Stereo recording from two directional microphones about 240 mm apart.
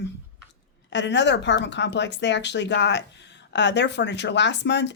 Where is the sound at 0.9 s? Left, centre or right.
Left.